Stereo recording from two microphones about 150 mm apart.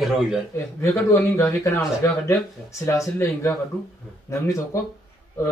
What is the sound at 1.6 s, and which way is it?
A man's voice, 20° left (ahead or behind).